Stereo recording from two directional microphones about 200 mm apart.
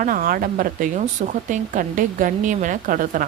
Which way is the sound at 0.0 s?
40° right (ahead or behind).